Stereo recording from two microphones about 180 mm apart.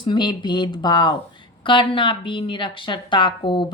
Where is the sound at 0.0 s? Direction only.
25° left (ahead or behind).